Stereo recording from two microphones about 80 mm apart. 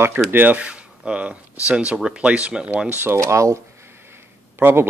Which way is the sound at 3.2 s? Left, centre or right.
Right.